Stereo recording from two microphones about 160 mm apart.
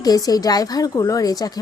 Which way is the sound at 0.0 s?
25° left (ahead or behind).